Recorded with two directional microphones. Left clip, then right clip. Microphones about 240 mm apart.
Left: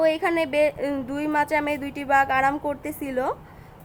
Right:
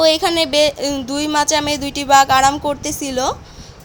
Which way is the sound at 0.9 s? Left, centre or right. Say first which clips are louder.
Right 6 dB; centre.